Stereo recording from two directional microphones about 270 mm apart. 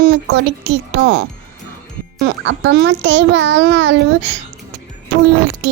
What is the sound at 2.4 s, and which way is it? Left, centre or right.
A child's voice, right.